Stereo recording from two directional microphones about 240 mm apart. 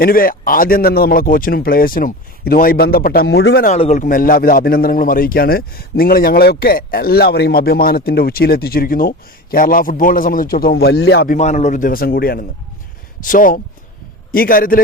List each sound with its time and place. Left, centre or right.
0.0 s a man's voice: left
3.7 s a man's voice: left
11.3 s a man's voice: left